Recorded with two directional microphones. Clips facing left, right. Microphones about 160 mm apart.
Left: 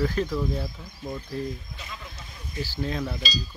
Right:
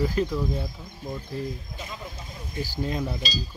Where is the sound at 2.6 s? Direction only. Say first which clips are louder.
Right 1 dB; 15° right (ahead or behind).